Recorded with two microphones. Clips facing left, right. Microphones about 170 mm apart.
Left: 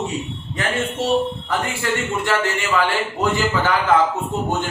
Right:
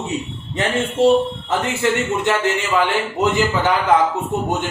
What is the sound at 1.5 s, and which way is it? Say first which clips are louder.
A man's voice: right 5 dB; 25° right (ahead or behind).